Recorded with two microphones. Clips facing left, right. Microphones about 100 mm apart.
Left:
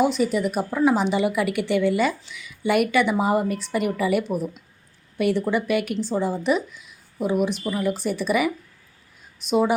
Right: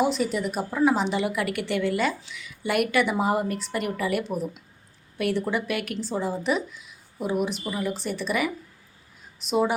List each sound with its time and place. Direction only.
0.0 s a woman's voice: centre (ahead or behind)